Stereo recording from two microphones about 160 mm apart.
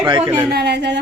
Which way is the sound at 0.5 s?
90° right.